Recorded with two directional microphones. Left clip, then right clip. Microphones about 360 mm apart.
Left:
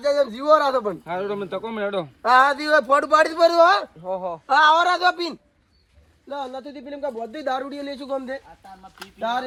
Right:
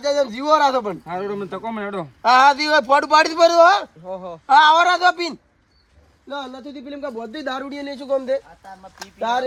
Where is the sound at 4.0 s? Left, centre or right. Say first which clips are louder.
Left 3 dB; left.